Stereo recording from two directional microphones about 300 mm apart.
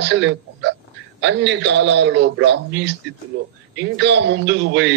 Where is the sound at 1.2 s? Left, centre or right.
Right.